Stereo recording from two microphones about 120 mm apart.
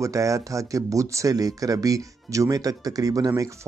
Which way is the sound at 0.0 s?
25° right (ahead or behind).